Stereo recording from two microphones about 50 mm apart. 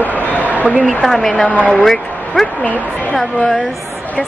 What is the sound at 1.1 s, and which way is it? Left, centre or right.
Speech, centre.